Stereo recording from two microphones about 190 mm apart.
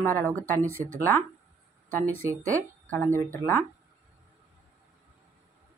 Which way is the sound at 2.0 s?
10° left (ahead or behind).